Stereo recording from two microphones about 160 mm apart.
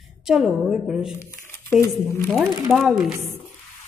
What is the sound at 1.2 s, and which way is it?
Crumpling, 15° left (ahead or behind).